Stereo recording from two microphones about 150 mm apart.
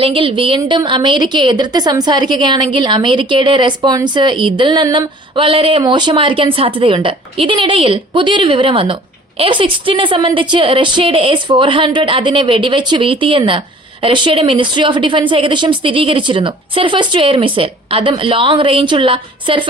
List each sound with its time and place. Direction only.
0.0 s a woman's voice: 35° right (ahead or behind)